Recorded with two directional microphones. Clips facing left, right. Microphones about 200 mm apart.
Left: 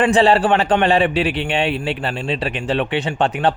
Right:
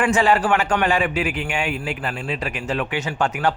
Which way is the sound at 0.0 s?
30° left (ahead or behind).